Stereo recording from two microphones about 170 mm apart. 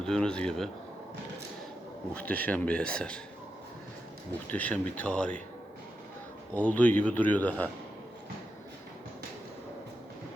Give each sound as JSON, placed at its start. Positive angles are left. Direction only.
{"t": 0.0, "sound": "speech", "side_deg": 5}
{"t": 2.1, "sound": "a man's voice", "side_deg": 10}
{"t": 4.4, "sound": "a man's voice", "side_deg": 10}
{"t": 6.5, "sound": "a man's voice", "side_deg": 10}